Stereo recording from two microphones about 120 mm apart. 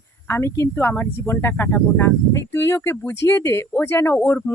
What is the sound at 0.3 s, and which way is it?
Speech, 20° left (ahead or behind).